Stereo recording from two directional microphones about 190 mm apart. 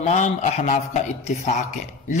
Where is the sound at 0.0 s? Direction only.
40° left (ahead or behind).